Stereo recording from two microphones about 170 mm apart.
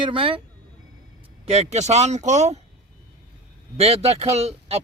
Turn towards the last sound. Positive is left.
turn(degrees=-40)  # may be behind; listen again after turning